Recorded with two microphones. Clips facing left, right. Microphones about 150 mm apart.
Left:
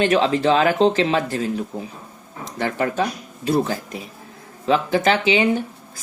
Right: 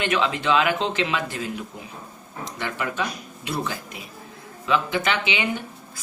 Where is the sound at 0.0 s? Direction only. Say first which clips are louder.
Left 7 dB; 35° left (ahead or behind).